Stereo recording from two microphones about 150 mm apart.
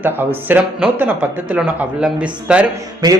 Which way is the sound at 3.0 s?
25° right (ahead or behind).